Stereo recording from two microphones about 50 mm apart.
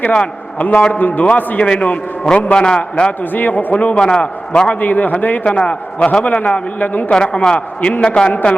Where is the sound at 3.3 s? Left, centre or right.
Left.